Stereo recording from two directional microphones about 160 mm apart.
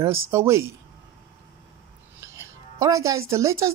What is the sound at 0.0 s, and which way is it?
Speech, 15° right (ahead or behind).